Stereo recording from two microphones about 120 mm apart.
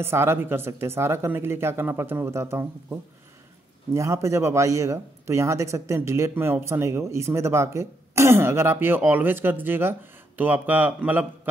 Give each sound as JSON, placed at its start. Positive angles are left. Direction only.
{"t": 0.0, "sound": "a man's voice", "side_deg": -20}